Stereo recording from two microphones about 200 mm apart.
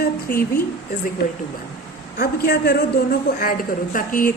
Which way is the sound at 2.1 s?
50° left (ahead or behind).